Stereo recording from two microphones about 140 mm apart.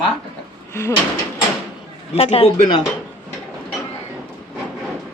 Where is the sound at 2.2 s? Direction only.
45° left (ahead or behind).